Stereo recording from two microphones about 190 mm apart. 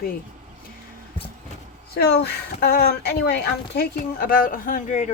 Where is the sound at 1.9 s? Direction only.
60° left (ahead or behind).